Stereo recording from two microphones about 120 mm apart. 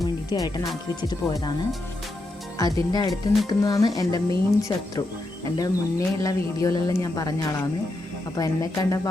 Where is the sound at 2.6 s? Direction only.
30° left (ahead or behind).